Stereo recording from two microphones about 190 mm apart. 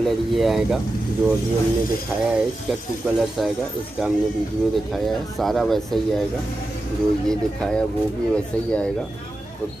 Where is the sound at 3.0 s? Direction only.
10° right (ahead or behind).